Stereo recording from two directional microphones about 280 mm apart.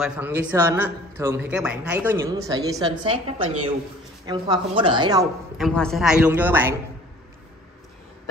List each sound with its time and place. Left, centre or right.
0.0 s a man's voice: centre
5.6 s a woman's voice: centre